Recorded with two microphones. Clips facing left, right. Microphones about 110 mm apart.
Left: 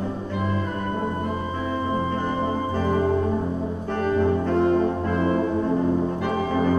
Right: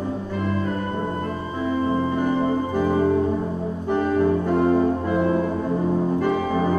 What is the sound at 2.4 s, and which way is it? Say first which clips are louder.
Music: right 3 dB; 15° right (ahead or behind).